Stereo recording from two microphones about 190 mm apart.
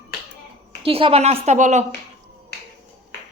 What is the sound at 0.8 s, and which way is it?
Speech, 30° right (ahead or behind).